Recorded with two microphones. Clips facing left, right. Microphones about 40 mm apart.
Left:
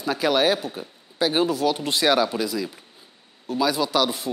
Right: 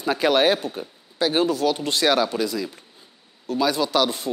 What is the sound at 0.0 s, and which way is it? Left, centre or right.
Speech, centre.